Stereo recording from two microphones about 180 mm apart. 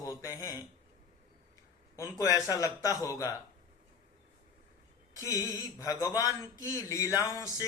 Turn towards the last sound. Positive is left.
turn(degrees=20)  # may be behind; listen again after turning